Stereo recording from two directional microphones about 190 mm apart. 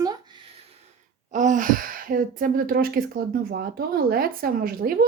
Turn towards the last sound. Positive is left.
turn(degrees=-50)  # may be behind; listen again after turning